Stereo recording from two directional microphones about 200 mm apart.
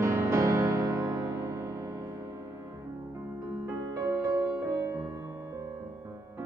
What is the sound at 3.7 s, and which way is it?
Music, 15° right (ahead or behind).